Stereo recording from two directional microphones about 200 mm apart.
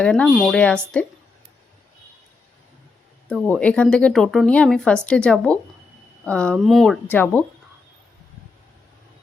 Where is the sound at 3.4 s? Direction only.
5° left (ahead or behind).